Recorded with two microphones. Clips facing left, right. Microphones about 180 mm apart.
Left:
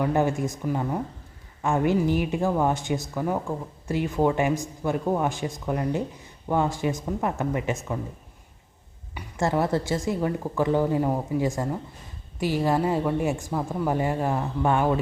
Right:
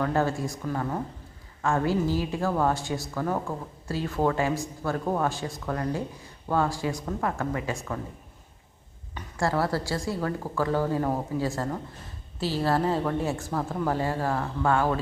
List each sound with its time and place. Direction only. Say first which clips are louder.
0.0 s a woman's voice: left 2 dB; 15° left (ahead or behind)
9.1 s a woman's voice: left 2 dB; 20° left (ahead or behind)